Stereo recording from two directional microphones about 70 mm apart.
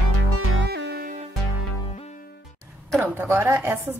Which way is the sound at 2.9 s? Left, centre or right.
Right.